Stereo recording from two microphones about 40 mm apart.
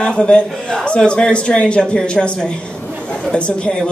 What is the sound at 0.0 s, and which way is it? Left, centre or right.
A man's voice, left.